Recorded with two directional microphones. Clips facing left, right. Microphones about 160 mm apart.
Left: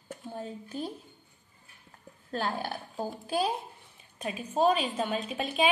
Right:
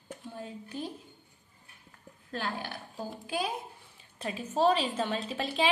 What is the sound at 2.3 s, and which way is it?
A woman's voice, 45° left (ahead or behind).